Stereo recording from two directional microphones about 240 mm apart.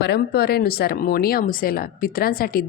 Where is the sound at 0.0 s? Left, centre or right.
Left.